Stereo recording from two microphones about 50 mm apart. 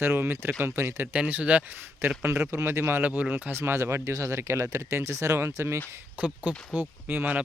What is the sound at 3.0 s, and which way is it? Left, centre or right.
Speech, right.